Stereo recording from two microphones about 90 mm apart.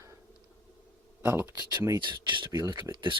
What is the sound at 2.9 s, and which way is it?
Speech, 60° right (ahead or behind).